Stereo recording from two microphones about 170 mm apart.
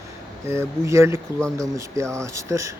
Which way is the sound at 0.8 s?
15° right (ahead or behind).